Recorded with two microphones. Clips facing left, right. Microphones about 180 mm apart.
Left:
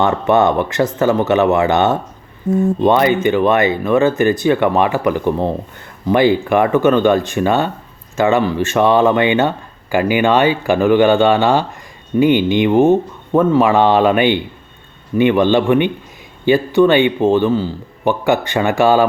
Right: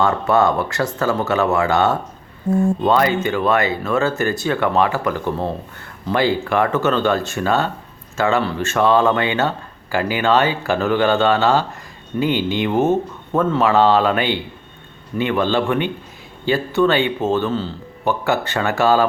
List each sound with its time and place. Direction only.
0.0 s speech: 20° left (ahead or behind)